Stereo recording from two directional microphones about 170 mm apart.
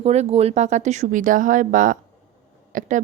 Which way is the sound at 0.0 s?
40° right (ahead or behind).